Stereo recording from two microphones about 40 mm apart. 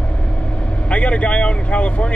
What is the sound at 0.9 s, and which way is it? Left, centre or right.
Speech, left.